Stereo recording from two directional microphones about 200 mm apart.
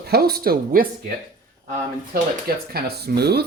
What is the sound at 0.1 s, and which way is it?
Speech, 50° right (ahead or behind).